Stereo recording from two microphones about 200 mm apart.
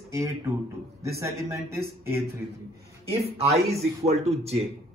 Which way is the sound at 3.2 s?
30° right (ahead or behind).